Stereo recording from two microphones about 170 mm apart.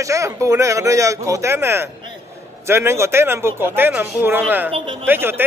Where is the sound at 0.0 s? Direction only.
20° right (ahead or behind).